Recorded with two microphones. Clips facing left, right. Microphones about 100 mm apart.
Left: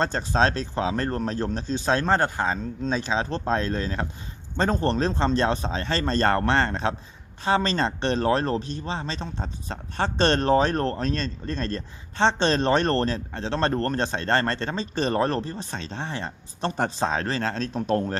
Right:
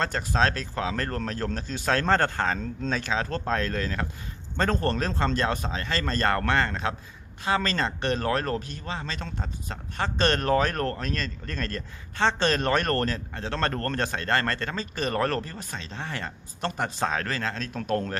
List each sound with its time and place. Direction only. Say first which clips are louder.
0.0 s speech: left 3 dB; 25° left (ahead or behind)